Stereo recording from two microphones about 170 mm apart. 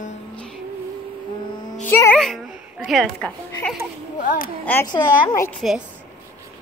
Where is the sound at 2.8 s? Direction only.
Centre (ahead or behind).